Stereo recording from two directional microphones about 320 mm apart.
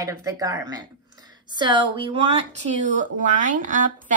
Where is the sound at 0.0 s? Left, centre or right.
Centre.